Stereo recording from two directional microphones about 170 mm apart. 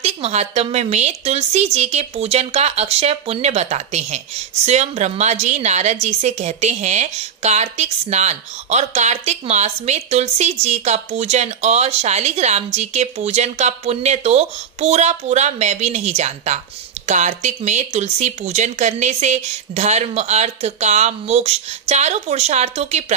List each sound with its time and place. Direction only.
0.0 s a woman's voice: 40° right (ahead or behind)